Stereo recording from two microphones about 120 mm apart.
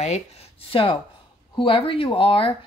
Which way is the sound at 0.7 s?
50° left (ahead or behind).